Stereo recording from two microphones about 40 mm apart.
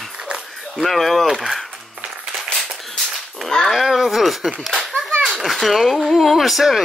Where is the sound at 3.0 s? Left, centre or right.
Centre.